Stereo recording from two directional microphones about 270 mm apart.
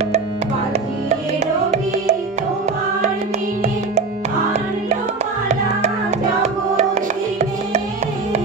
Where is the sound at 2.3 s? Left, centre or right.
Right.